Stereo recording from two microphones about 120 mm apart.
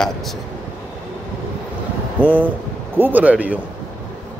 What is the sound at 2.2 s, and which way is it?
A man's voice, 15° right (ahead or behind).